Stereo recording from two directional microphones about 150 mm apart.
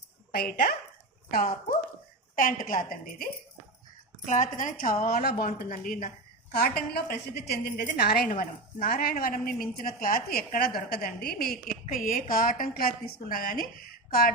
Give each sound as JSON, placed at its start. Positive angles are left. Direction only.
{"t": 0.3, "sound": "a woman's voice", "side_deg": 90}
{"t": 1.3, "sound": "a woman's voice", "side_deg": 75}
{"t": 2.3, "sound": "a woman's voice", "side_deg": 65}
{"t": 4.3, "sound": "a woman's voice", "side_deg": 55}
{"t": 5.0, "sound": "a woman's voice", "side_deg": 90}
{"t": 5.5, "sound": "a woman's voice", "side_deg": 65}
{"t": 6.5, "sound": "a woman's voice", "side_deg": 90}